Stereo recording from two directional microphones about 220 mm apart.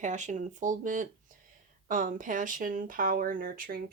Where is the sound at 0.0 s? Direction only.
35° right (ahead or behind).